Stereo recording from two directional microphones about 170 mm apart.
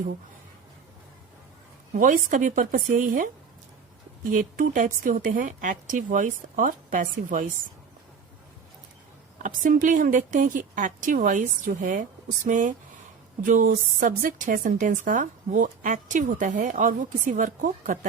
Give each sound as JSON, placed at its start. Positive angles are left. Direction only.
{"t": 1.9, "sound": "a woman's voice", "side_deg": -50}
{"t": 9.4, "sound": "a woman's voice", "side_deg": -50}